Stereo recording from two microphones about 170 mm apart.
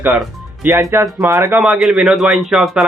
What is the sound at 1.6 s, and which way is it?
Speech, centre (ahead or behind).